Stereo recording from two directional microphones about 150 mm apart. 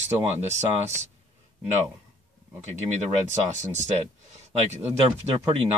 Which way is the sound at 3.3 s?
55° right (ahead or behind).